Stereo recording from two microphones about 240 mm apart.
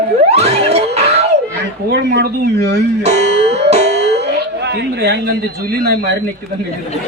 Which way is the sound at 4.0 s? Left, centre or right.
Right.